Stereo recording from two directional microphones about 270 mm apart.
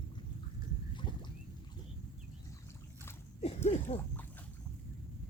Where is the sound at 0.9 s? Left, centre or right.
Centre.